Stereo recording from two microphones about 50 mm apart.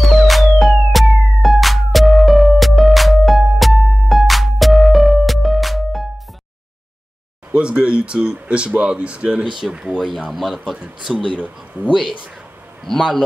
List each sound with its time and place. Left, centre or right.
0.0 s music: centre
7.5 s speech: right
9.9 s a man's voice: centre
11.3 s speech: right
11.9 s a man's voice: centre